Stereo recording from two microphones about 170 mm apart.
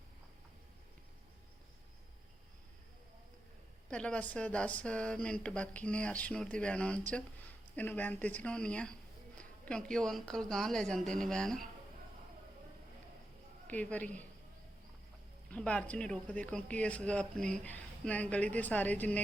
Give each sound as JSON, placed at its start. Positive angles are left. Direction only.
{"t": 3.8, "sound": "speech", "side_deg": 5}
{"t": 13.7, "sound": "speech", "side_deg": 10}
{"t": 15.4, "sound": "speech", "side_deg": 5}